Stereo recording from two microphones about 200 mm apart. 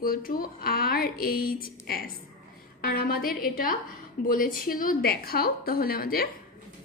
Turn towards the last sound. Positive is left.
turn(degrees=50)  # may be behind; listen again after turning